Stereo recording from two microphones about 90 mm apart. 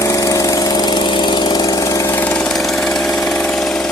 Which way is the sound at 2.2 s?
20° left (ahead or behind).